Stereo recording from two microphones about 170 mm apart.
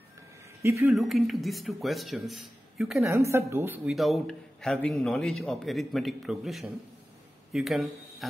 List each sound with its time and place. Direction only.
0.6 s speech: 15° right (ahead or behind)
0.9 s a man's voice: centre (ahead or behind)
3.0 s a woman's voice: 15° right (ahead or behind)
3.9 s a man's voice: centre (ahead or behind)